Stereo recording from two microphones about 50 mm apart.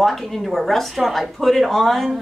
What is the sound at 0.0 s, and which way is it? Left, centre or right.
A woman's voice, centre.